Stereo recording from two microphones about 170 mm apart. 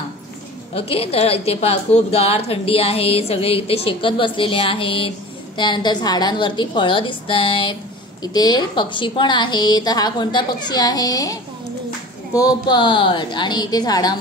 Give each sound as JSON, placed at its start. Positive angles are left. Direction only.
{"t": 0.7, "sound": "a woman's voice", "side_deg": 35}
{"t": 12.4, "sound": "a woman's voice", "side_deg": 25}